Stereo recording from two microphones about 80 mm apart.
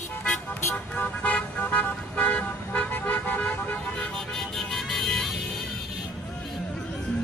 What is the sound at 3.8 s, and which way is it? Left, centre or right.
Vehicle, centre.